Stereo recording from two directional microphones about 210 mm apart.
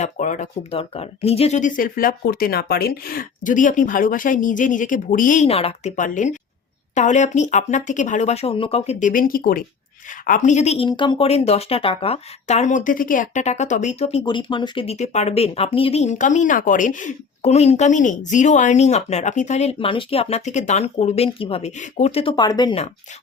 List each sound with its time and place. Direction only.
0.0 s speech: 35° left (ahead or behind); by 22.7 s 20° left (ahead or behind)